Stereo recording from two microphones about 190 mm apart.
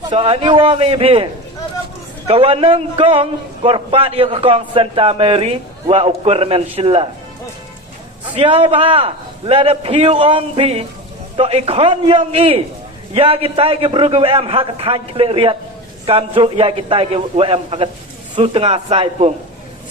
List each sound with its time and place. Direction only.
0.1 s a man's voice: 30° right (ahead or behind)
8.4 s a man's voice: 30° right (ahead or behind)